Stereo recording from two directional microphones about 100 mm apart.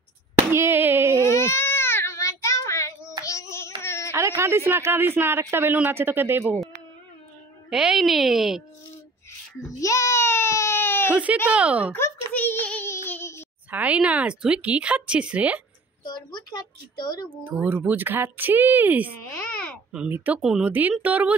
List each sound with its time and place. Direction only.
0.5 s a sound: 25° right (ahead or behind)
1.2 s child singing: 30° left (ahead or behind)
3.8 s a sound: 25° left (ahead or behind)
4.1 s speech: 25° right (ahead or behind)
7.7 s a woman's voice: 5° right (ahead or behind)
9.7 s baby cry: 35° left (ahead or behind)
11.1 s a sound: 10° right (ahead or behind)
11.4 s speech: 15° right (ahead or behind)
12.3 s child singing: 15° left (ahead or behind)
13.7 s speech: 15° right (ahead or behind)
16.0 s a woman's voice: 45° left (ahead or behind)
17.4 s speech: 20° right (ahead or behind)
20.4 s speech: 10° right (ahead or behind)